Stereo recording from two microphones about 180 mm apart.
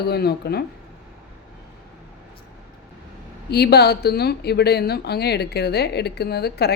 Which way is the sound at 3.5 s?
65° left (ahead or behind).